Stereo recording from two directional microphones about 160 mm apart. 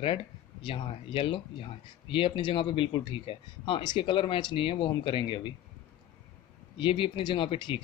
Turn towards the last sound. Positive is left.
turn(degrees=30)  # may be behind; listen again after turning